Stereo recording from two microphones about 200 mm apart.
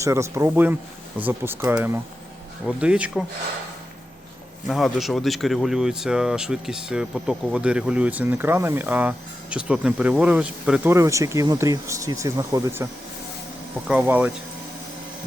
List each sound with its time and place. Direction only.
0.0 s speech: 15° right (ahead or behind)
4.6 s speech: centre (ahead or behind)